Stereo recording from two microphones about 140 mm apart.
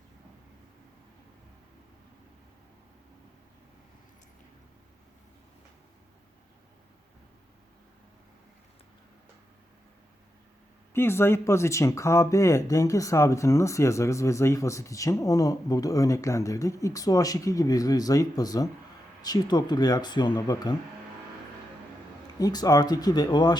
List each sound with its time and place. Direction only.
10.9 s speech: 15° left (ahead or behind)
22.4 s speech: 25° left (ahead or behind)